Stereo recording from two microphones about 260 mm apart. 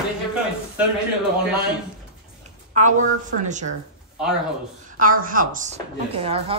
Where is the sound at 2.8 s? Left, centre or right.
Right.